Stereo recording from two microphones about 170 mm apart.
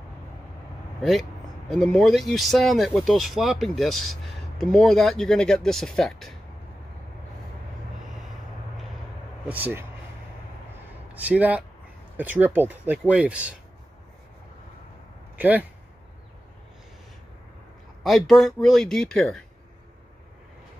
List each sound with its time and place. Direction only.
1.7 s speech: centre (ahead or behind)
9.5 s speech: 10° right (ahead or behind)
11.1 s speech: 10° right (ahead or behind)
15.3 s speech: 10° right (ahead or behind)
18.0 s speech: centre (ahead or behind)